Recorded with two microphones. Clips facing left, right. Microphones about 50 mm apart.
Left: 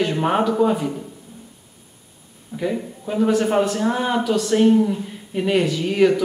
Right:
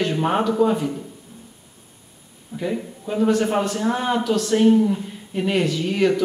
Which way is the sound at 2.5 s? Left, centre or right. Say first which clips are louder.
Left 2 dB; centre.